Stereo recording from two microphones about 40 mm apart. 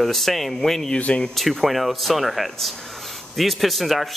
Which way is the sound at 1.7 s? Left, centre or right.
Centre.